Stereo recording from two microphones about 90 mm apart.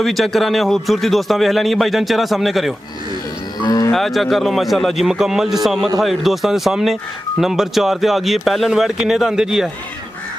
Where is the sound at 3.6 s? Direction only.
45° left (ahead or behind).